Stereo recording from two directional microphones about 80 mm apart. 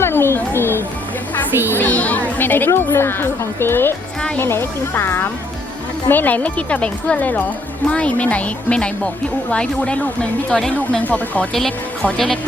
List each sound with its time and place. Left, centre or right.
0.0 s music: left
1.5 s speech: right
1.7 s speech: centre
12.1 s speech: centre